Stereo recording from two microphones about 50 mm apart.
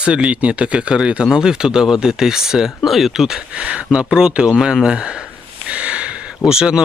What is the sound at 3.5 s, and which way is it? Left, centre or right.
A man's voice, right.